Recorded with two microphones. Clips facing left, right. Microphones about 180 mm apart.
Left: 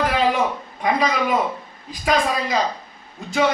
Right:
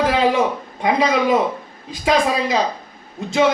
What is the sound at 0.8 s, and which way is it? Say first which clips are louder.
Speech: right 3 dB; 25° right (ahead or behind).